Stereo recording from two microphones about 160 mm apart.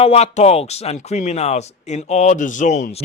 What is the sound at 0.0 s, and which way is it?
Speech, 40° left (ahead or behind).